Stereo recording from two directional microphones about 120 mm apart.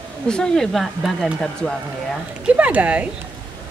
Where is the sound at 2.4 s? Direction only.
10° right (ahead or behind).